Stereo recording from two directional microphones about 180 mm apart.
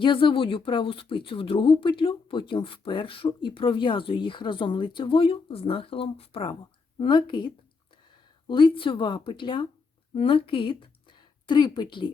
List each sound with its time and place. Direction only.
0.0 s speech: 25° left (ahead or behind)